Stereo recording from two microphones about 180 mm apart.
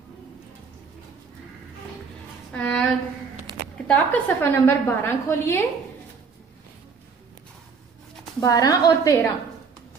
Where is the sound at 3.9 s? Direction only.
10° left (ahead or behind).